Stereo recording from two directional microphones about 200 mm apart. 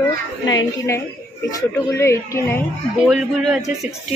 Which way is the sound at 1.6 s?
15° left (ahead or behind).